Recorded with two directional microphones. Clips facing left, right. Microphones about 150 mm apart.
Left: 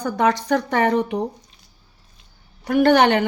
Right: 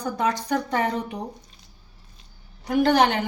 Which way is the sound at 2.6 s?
65° left (ahead or behind).